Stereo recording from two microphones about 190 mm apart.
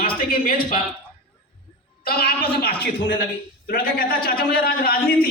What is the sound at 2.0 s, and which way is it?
A man's voice, 55° left (ahead or behind).